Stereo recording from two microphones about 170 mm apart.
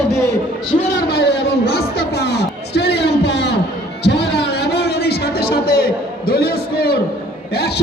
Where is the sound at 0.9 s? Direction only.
75° left (ahead or behind).